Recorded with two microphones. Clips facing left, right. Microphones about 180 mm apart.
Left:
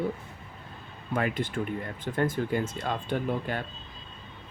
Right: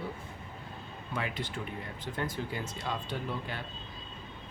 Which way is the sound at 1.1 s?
50° left (ahead or behind).